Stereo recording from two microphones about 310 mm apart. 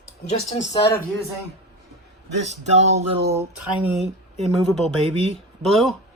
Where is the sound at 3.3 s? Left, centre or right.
Centre.